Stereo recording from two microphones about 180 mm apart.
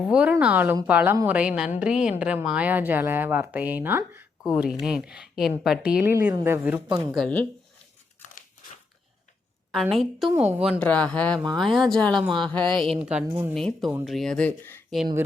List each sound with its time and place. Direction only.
0.0 s speech: 5° right (ahead or behind)
9.9 s speech: centre (ahead or behind)
10.8 s speech: 5° left (ahead or behind)
13.0 s speech: 5° right (ahead or behind); by 14.8 s 10° left (ahead or behind)
14.8 s speech: centre (ahead or behind)